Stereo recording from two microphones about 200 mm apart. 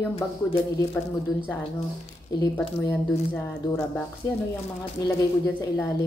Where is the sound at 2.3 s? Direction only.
15° left (ahead or behind).